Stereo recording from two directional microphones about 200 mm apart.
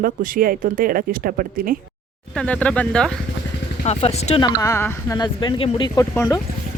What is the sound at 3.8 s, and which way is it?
Speech, 30° left (ahead or behind).